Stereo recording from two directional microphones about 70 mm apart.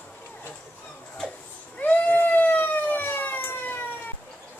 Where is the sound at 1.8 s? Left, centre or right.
Left.